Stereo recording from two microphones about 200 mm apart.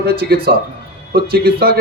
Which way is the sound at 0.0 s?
50° right (ahead or behind).